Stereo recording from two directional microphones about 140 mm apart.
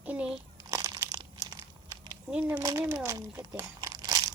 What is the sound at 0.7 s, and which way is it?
Crumpling, 20° right (ahead or behind).